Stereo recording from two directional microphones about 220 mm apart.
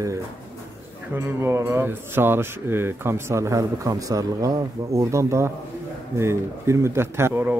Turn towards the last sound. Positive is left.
turn(degrees=-10)  # may be behind; listen again after turning